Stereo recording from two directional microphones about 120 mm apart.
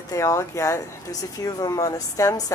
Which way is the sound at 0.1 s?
25° left (ahead or behind).